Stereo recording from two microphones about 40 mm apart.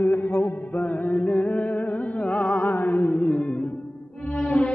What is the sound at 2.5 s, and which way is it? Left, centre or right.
Mantra, left.